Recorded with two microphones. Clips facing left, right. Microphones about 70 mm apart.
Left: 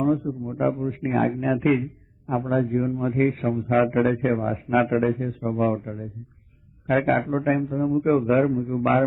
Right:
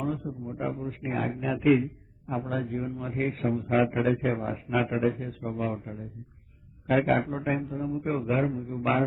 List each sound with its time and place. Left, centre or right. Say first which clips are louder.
0.0 s a man's voice: left 9 dB; left
2.3 s a man's voice: left 7 dB; left
2.6 s a man's voice: left 9 dB; left